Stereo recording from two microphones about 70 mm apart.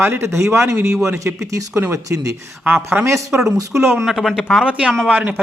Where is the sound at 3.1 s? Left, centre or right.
Right.